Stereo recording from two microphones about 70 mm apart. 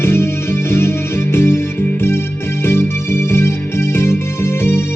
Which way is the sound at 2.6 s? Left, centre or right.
Left.